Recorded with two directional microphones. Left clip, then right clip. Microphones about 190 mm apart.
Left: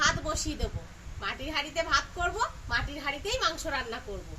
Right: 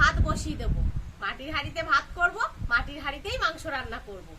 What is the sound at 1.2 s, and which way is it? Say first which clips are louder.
A woman's voice: right 1 dB; centre (ahead or behind).